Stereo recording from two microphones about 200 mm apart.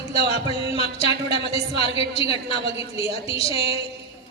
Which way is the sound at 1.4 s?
30° left (ahead or behind).